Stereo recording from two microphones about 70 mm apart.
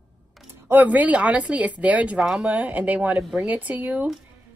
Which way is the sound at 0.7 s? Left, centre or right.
Right.